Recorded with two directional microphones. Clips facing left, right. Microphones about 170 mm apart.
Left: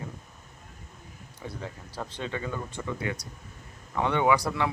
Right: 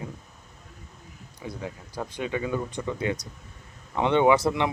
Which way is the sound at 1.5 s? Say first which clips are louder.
Right 3 dB; 15° right (ahead or behind).